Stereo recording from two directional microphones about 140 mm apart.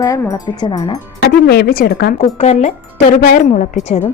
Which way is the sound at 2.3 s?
55° left (ahead or behind).